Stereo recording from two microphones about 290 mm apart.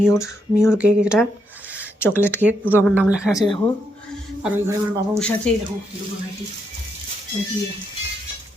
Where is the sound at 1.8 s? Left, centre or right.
Centre.